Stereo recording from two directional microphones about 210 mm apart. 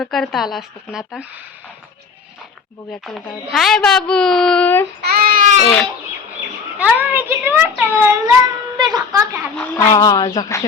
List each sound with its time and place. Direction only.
0.0 s speech: centre (ahead or behind)
2.9 s speech: centre (ahead or behind)
5.0 s child singing: 45° right (ahead or behind)
6.7 s a child's voice: 5° right (ahead or behind)
8.8 s a sound: 20° right (ahead or behind)
9.6 s speech: 15° left (ahead or behind)